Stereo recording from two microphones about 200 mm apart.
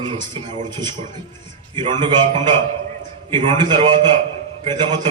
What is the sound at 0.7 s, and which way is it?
A man's voice, 20° right (ahead or behind).